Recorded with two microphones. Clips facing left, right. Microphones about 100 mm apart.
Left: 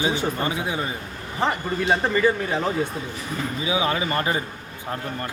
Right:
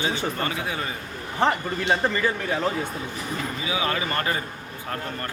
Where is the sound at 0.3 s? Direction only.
20° left (ahead or behind).